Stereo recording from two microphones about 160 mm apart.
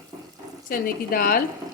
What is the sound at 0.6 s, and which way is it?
Speech, 65° left (ahead or behind).